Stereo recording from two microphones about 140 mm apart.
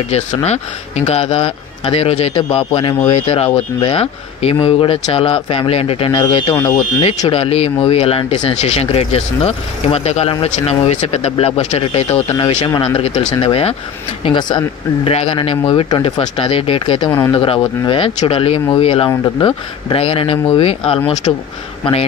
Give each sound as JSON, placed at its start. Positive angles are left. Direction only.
{"t": 0.1, "sound": "speech", "side_deg": 50}
{"t": 7.0, "sound": "speech", "side_deg": 45}
{"t": 17.1, "sound": "speech", "side_deg": 25}
{"t": 17.4, "sound": "speech", "side_deg": 35}
{"t": 21.3, "sound": "speech", "side_deg": 35}